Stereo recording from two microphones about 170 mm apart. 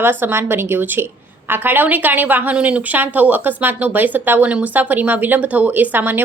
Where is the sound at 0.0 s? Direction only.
10° right (ahead or behind).